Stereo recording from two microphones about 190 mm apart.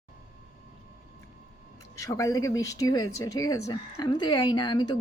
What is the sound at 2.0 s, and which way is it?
A woman's voice, 15° left (ahead or behind).